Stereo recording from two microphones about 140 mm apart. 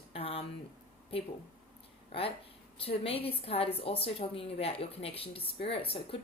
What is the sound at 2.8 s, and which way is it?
A woman's voice, 40° left (ahead or behind).